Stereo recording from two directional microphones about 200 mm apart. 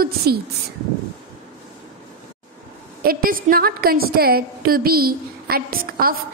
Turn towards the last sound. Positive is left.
turn(degrees=-45)  # may be behind; listen again after turning